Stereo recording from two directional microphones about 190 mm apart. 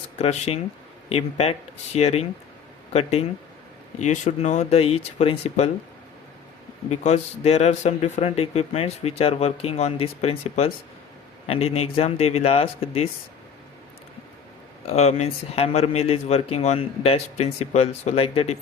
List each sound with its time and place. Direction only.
0.2 s speech: 35° left (ahead or behind)
6.9 s speech: 35° left (ahead or behind)
14.8 s speech: 35° left (ahead or behind)